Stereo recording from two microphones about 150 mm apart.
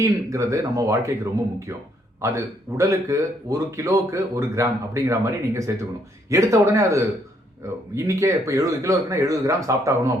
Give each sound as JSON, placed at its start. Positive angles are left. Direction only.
{"t": 0.0, "sound": "speech", "side_deg": -20}
{"t": 2.2, "sound": "speech", "side_deg": -20}